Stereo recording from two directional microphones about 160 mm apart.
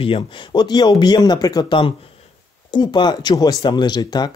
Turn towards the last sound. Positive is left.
turn(degrees=25)  # may be behind; listen again after turning